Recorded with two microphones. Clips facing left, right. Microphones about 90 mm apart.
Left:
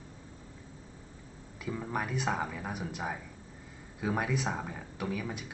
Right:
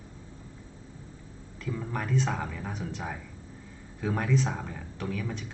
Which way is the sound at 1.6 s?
10° left (ahead or behind).